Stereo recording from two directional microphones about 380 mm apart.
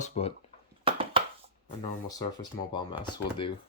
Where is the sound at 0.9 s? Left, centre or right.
Centre.